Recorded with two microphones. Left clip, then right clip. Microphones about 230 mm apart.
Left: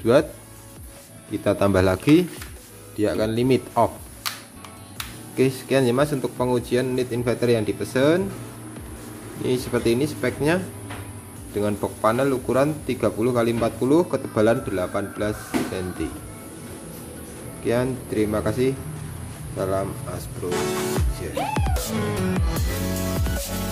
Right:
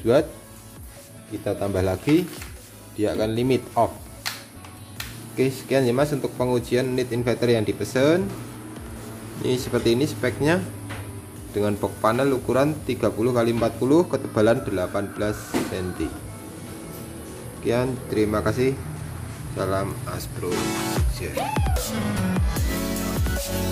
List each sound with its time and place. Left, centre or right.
0.0 s speech: centre
1.4 s speech: left; by 3.9 s centre
5.3 s a man's voice: centre
9.4 s a man's voice: centre
17.6 s a man's voice: centre
19.5 s music: centre